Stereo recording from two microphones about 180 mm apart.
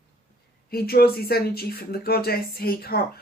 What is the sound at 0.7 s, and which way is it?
Speech, 60° left (ahead or behind).